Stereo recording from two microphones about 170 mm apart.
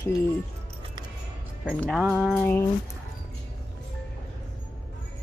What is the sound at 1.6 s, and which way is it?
Speech, centre (ahead or behind).